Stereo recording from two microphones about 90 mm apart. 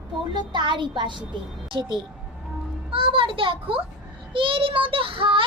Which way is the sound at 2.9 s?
80° right.